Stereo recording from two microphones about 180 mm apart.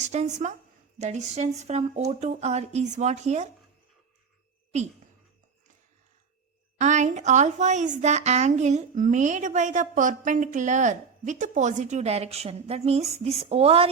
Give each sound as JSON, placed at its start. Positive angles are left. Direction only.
{"t": 0.0, "sound": "a woman's voice", "side_deg": -40}
{"t": 6.7, "sound": "a woman's voice", "side_deg": -40}